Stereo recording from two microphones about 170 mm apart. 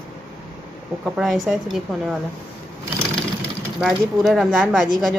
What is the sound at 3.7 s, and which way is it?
Speech, centre (ahead or behind).